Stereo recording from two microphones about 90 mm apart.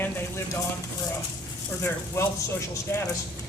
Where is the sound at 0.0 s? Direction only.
25° left (ahead or behind).